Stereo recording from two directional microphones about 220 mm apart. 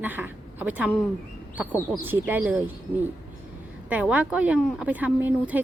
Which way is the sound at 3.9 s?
5° right (ahead or behind).